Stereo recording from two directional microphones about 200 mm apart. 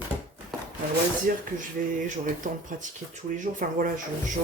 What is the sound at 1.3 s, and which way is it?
Speech, 45° right (ahead or behind).